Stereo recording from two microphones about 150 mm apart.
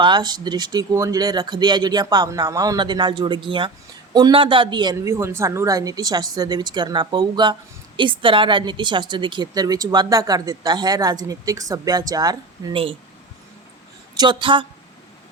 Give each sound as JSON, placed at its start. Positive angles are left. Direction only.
{"t": 0.0, "sound": "a woman's voice", "side_deg": -30}
{"t": 5.0, "sound": "a woman's voice", "side_deg": -15}
{"t": 12.7, "sound": "a man's voice", "side_deg": -40}
{"t": 14.2, "sound": "a man's voice", "side_deg": -30}